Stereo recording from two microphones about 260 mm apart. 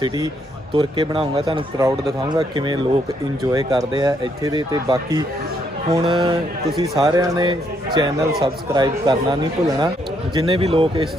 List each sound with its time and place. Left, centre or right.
0.7 s speech: centre